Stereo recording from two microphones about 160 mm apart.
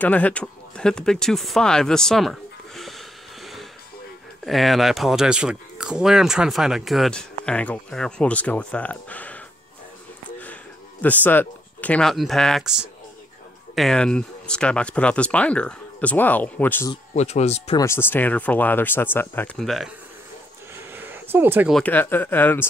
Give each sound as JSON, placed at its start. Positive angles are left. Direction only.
{"t": 0.0, "sound": "speech", "side_deg": 10}
{"t": 4.5, "sound": "speech", "side_deg": 0}
{"t": 10.4, "sound": "speech", "side_deg": 10}
{"t": 17.1, "sound": "speech", "side_deg": 45}
{"t": 17.7, "sound": "speech", "side_deg": 15}
{"t": 19.5, "sound": "speech", "side_deg": 0}
{"t": 20.9, "sound": "a sound", "side_deg": -15}
{"t": 21.7, "sound": "speech", "side_deg": 10}